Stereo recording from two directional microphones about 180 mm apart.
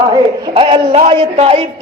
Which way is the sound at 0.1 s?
25° right (ahead or behind).